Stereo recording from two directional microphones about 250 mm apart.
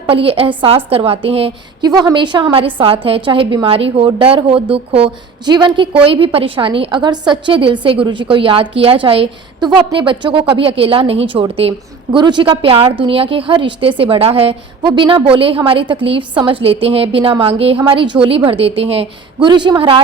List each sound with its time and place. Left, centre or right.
0.1 s a woman's voice: right